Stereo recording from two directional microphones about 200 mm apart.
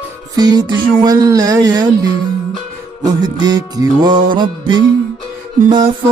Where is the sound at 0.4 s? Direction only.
20° right (ahead or behind).